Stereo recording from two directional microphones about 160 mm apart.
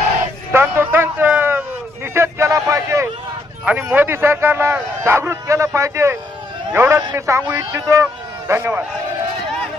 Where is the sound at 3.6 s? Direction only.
10° right (ahead or behind).